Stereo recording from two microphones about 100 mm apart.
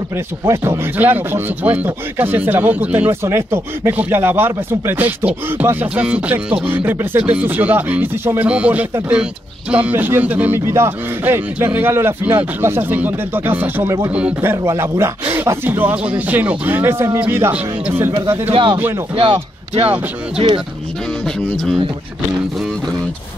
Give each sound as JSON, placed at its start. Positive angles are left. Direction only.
{"t": 0.9, "sound": "a man's voice", "side_deg": -20}
{"t": 3.1, "sound": "a man's voice", "side_deg": -30}
{"t": 18.5, "sound": "speech", "side_deg": -55}
{"t": 19.1, "sound": "speech", "side_deg": -75}